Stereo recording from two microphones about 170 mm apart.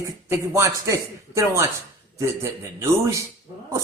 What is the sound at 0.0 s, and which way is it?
Speech, 20° right (ahead or behind).